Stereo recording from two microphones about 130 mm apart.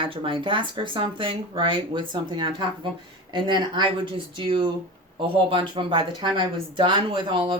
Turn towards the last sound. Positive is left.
turn(degrees=-40)  # may be behind; listen again after turning